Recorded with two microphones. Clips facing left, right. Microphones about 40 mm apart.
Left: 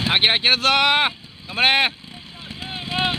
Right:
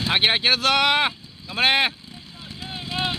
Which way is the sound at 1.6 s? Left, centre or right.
Centre.